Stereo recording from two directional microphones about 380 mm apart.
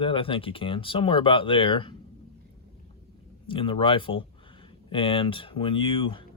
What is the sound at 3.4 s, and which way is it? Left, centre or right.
Speech, centre.